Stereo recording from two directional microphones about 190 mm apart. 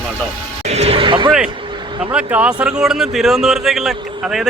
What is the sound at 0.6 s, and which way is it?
Speech, 35° right (ahead or behind).